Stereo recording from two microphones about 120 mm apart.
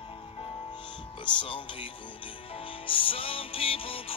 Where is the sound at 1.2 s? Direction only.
40° left (ahead or behind).